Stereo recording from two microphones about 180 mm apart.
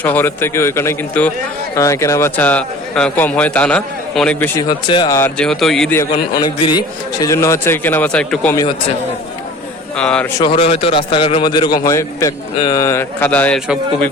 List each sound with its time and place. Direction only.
0.0 s a man's voice: 10° left (ahead or behind)
4.7 s a man's voice: 25° left (ahead or behind)
5.4 s speech: centre (ahead or behind)
6.1 s a man's voice: 25° left (ahead or behind); by 8.5 s 5° left (ahead or behind)
10.0 s speech: 5° left (ahead or behind)
10.5 s a man's voice: 35° left (ahead or behind); by 13.6 s 10° left (ahead or behind)